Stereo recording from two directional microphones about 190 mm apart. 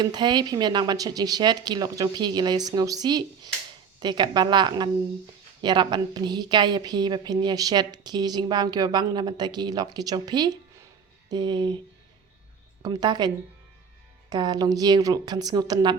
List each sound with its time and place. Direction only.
0.0 s speech: 25° right (ahead or behind)
12.8 s speech: 20° right (ahead or behind)